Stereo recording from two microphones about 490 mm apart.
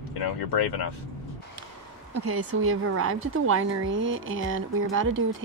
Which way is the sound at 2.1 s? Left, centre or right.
Right.